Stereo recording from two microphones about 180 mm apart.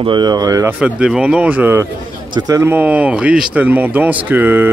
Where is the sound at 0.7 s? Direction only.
5° right (ahead or behind).